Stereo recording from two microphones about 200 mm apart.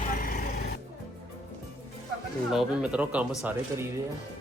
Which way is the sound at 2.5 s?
5° right (ahead or behind).